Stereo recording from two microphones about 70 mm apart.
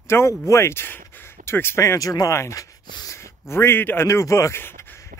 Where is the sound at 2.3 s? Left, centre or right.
Left.